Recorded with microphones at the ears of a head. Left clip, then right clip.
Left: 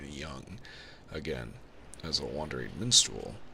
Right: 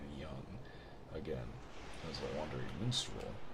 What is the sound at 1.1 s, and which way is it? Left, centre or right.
Speech, left.